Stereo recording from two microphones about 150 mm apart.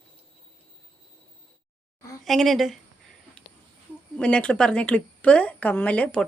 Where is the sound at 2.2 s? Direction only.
Centre (ahead or behind).